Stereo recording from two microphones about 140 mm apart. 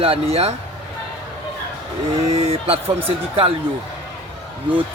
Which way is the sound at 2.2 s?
50° right (ahead or behind).